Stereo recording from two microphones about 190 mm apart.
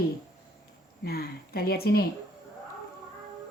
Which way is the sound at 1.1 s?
55° left (ahead or behind).